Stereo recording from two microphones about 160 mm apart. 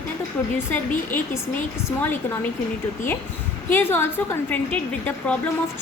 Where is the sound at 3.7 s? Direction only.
15° left (ahead or behind).